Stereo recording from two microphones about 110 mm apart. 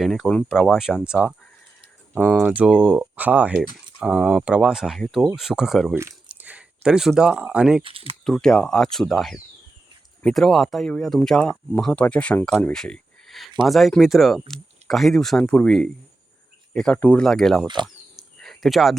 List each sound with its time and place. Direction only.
0.0 s speech: centre (ahead or behind)
5.9 s speech: 25° right (ahead or behind)
6.2 s speech: 15° right (ahead or behind)
7.9 s speech: 55° right (ahead or behind)
8.2 s speech: 5° left (ahead or behind)
17.2 s speech: 5° left (ahead or behind)
17.8 s a sound: centre (ahead or behind)